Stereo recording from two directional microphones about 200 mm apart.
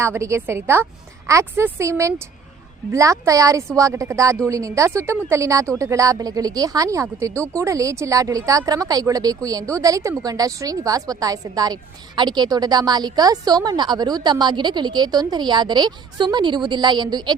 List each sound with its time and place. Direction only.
0.0 s speech: 15° right (ahead or behind)